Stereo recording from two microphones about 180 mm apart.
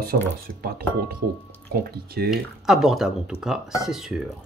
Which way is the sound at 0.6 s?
55° right (ahead or behind).